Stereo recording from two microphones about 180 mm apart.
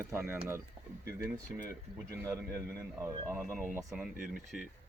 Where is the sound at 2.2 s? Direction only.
15° right (ahead or behind).